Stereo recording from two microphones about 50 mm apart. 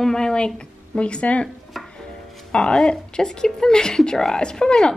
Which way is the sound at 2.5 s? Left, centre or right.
Centre.